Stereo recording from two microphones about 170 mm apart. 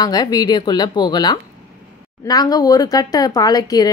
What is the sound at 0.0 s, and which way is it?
Speech, 25° left (ahead or behind).